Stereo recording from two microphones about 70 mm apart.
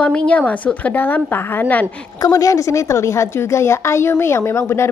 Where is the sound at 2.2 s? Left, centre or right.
Left.